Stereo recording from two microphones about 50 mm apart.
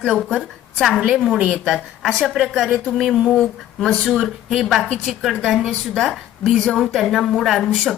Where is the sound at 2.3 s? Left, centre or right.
Centre.